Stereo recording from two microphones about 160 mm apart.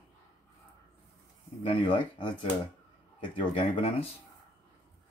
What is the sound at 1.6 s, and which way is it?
Speech, 35° left (ahead or behind).